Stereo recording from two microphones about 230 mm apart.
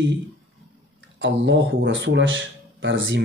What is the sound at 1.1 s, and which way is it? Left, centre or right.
Speech, right.